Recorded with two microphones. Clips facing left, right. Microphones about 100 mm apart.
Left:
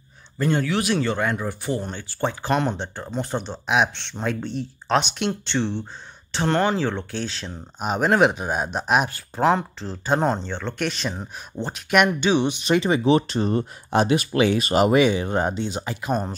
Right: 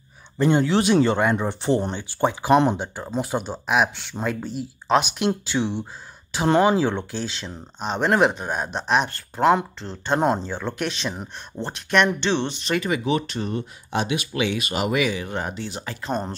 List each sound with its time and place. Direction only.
0.4 s speech: 20° right (ahead or behind)
7.1 s speech: centre (ahead or behind)